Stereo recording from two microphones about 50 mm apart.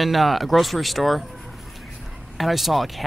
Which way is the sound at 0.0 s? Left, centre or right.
Centre.